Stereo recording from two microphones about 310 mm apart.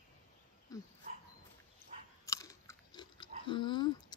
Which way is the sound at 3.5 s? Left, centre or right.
Centre.